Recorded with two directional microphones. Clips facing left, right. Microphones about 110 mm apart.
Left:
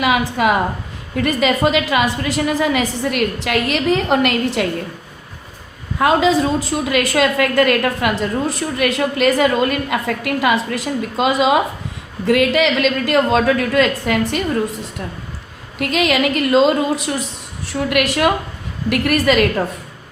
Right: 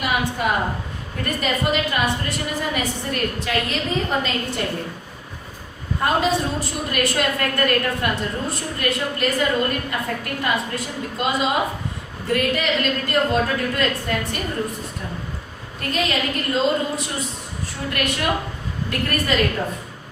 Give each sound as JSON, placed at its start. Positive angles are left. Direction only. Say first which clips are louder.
{"t": 0.0, "sound": "a woman's voice", "louder": "left 6 dB", "side_deg": 90}
{"t": 6.0, "sound": "a woman's voice", "louder": "left 6 dB", "side_deg": 90}
{"t": 15.8, "sound": "a woman's voice", "louder": "left 7 dB", "side_deg": 80}